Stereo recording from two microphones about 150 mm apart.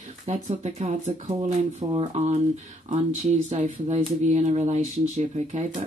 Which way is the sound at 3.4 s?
50° right (ahead or behind).